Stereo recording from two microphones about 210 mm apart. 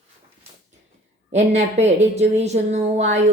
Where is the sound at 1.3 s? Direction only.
35° right (ahead or behind).